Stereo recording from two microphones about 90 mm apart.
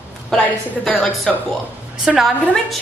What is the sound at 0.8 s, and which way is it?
Speech, 15° left (ahead or behind).